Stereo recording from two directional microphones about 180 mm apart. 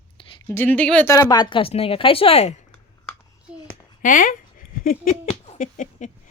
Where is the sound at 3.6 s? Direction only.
45° left (ahead or behind).